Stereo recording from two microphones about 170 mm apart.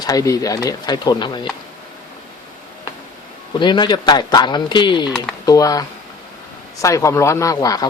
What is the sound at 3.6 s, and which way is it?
Speech, 25° left (ahead or behind).